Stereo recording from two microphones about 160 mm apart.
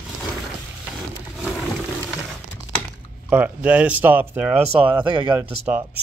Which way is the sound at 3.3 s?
10° right (ahead or behind).